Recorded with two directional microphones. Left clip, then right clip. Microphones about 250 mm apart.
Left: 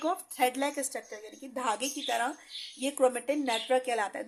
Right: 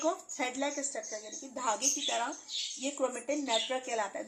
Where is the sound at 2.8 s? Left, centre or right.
Left.